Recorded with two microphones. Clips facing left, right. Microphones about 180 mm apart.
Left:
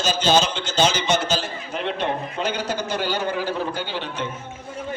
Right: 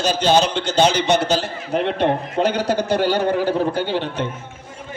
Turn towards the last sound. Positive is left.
turn(degrees=-60)  # may be behind; listen again after turning